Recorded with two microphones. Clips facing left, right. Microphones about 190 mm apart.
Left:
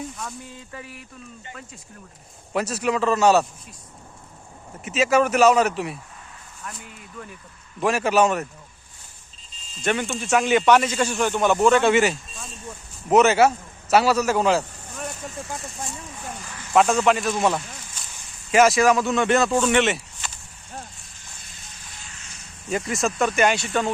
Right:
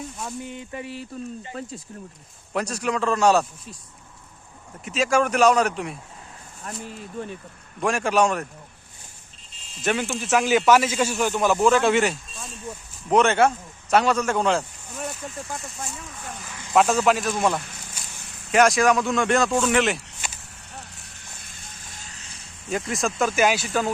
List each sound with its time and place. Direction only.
0.2 s speech: 20° right (ahead or behind)
1.5 s speech: 35° right (ahead or behind)
2.5 s a man's voice: 5° left (ahead or behind)
4.9 s a man's voice: 5° left (ahead or behind)
6.6 s speech: 35° right (ahead or behind)
7.8 s a man's voice: 5° left (ahead or behind)
9.8 s a man's voice: 5° right (ahead or behind)
16.4 s a sound: 15° right (ahead or behind)
16.7 s a man's voice: centre (ahead or behind)
21.9 s vehicle: 40° right (ahead or behind)
22.7 s a man's voice: centre (ahead or behind)